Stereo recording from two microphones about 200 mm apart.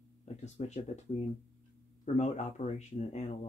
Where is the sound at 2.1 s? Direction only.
35° left (ahead or behind).